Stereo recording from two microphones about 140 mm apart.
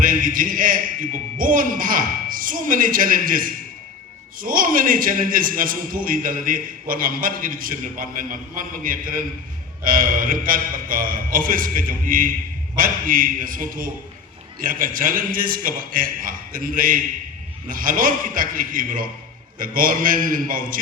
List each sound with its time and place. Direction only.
0.0 s a man's voice: 75° right (ahead or behind)